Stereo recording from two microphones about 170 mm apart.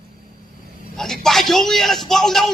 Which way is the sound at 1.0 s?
Centre (ahead or behind).